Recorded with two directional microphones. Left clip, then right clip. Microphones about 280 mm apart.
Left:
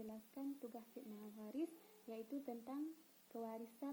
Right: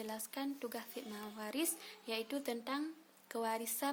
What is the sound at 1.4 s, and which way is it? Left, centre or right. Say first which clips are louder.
A woman's voice: right 7 dB; right.